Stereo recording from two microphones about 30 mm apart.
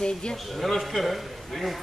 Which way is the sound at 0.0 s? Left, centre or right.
Left.